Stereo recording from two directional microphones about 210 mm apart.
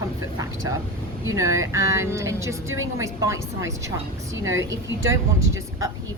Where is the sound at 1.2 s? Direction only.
15° right (ahead or behind).